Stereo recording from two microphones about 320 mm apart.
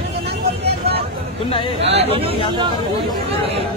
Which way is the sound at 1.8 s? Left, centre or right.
Centre.